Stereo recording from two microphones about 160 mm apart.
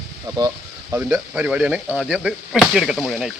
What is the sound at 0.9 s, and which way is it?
A man's voice, 5° right (ahead or behind).